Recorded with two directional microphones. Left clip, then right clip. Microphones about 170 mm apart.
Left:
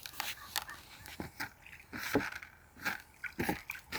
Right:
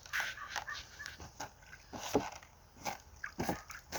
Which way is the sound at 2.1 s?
65° left (ahead or behind).